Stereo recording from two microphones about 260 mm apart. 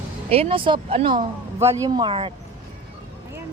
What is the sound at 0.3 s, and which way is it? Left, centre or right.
Speech, right.